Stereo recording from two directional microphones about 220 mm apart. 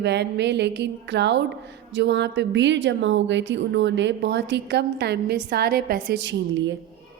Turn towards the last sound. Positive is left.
turn(degrees=-55)  # may be behind; listen again after turning